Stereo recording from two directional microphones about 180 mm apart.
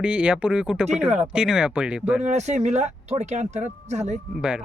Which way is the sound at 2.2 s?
40° right (ahead or behind).